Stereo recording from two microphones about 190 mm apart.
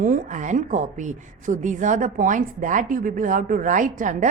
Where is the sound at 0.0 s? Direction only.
40° right (ahead or behind).